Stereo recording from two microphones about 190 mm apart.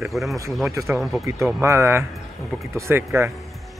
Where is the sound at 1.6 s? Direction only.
15° right (ahead or behind).